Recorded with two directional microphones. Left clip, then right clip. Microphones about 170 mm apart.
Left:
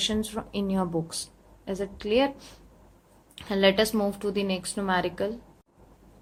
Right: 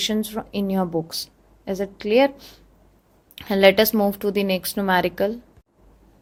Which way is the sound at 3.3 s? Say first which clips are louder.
Right 7 dB; 40° right (ahead or behind).